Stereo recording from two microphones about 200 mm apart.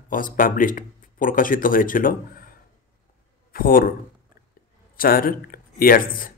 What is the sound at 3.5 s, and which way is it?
Speech, 45° left (ahead or behind).